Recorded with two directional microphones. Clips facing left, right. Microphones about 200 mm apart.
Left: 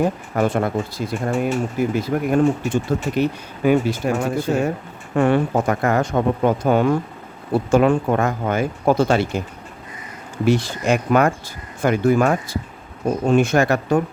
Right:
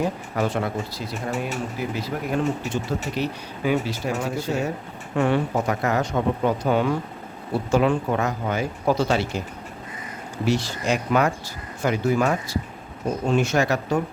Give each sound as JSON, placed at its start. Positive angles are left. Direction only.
{"t": 0.0, "sound": "speech", "side_deg": 50}
{"t": 10.4, "sound": "speech", "side_deg": 55}